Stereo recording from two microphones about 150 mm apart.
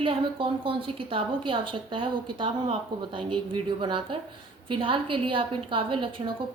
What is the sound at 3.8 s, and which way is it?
A woman's voice, 35° right (ahead or behind).